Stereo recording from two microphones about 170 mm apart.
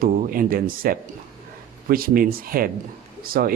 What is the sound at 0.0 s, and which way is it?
Speech, 60° right (ahead or behind).